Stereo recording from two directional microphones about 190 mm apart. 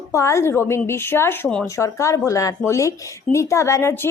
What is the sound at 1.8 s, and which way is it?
A woman's voice, 15° left (ahead or behind).